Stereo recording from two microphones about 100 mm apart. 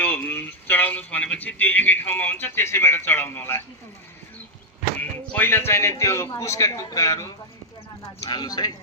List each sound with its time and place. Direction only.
0.0 s speech: 15° left (ahead or behind)
5.3 s a woman's voice: 20° left (ahead or behind); by 8.7 s 40° left (ahead or behind)